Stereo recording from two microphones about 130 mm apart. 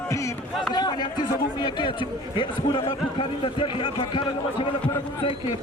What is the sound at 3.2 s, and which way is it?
A man's voice, 40° left (ahead or behind).